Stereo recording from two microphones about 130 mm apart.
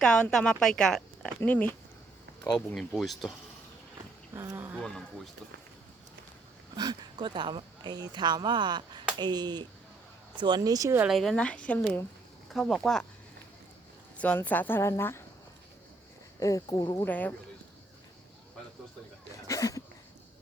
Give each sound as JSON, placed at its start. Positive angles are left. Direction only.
{"t": 0.0, "sound": "a woman's voice", "side_deg": 5}
{"t": 2.7, "sound": "a woman's voice", "side_deg": 0}
{"t": 4.4, "sound": "speech", "side_deg": -20}
{"t": 4.8, "sound": "a woman's voice", "side_deg": 5}
{"t": 6.7, "sound": "speech", "side_deg": -35}
{"t": 11.0, "sound": "a woman's voice", "side_deg": 0}
{"t": 14.2, "sound": "a woman's voice", "side_deg": 10}
{"t": 16.4, "sound": "speech", "side_deg": 25}
{"t": 17.0, "sound": "a woman's voice", "side_deg": 10}
{"t": 19.5, "sound": "a sound", "side_deg": 25}